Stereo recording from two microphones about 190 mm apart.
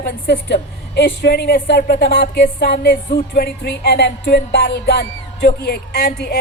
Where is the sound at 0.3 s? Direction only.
60° left (ahead or behind).